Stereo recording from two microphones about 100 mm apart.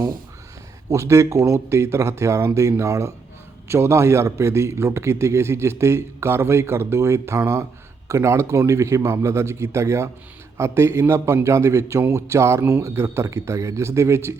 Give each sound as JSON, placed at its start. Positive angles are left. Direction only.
{"t": 0.9, "sound": "a man's voice", "side_deg": -30}